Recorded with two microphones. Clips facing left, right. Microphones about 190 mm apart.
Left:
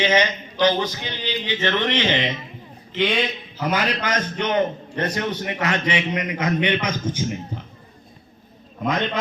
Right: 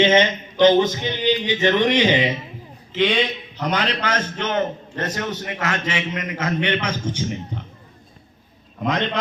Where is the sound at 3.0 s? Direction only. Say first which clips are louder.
Right 2 dB; centre (ahead or behind).